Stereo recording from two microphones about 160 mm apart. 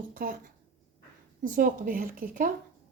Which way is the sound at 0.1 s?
60° right (ahead or behind).